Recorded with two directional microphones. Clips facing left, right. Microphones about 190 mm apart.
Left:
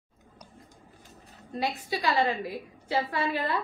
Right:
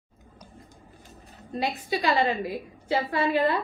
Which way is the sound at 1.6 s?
20° right (ahead or behind).